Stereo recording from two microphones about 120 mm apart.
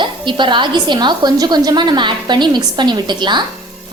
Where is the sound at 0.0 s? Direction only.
40° right (ahead or behind).